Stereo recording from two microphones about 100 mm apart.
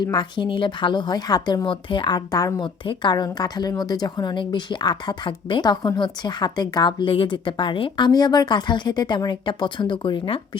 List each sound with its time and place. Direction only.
0.0 s speech: 50° left (ahead or behind)